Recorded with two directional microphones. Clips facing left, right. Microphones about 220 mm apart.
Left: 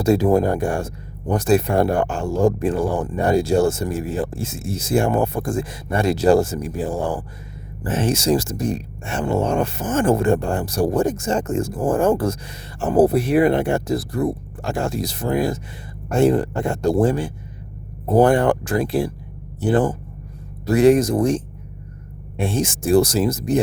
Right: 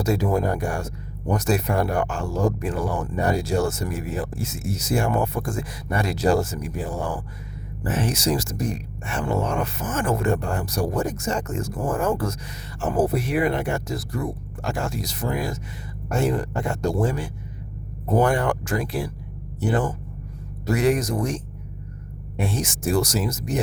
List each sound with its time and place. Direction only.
0.0 s a man's voice: 30° left (ahead or behind)